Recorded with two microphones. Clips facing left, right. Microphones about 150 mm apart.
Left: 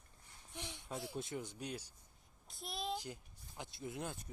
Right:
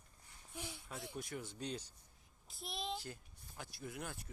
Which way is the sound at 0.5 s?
5° right (ahead or behind).